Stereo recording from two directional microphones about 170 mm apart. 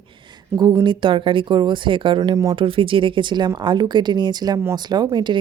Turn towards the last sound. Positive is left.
turn(degrees=-25)  # may be behind; listen again after turning